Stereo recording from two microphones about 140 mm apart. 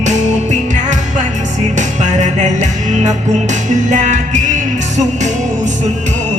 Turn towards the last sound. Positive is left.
turn(degrees=-60)  # may be behind; listen again after turning